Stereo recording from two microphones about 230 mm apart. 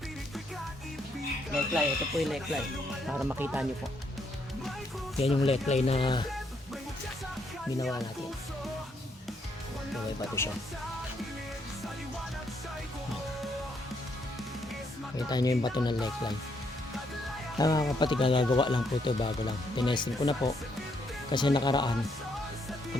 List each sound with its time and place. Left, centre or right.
1.5 s speech: centre
5.2 s speech: left
10.4 s speech: centre
15.1 s speech: centre
17.6 s speech: centre